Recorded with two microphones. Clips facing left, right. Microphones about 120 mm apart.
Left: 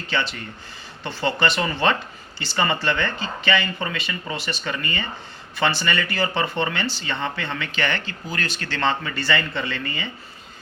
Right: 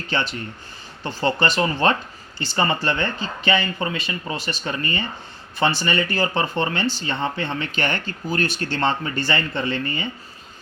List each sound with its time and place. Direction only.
0.1 s speech: 45° right (ahead or behind)
8.8 s speech: 35° right (ahead or behind)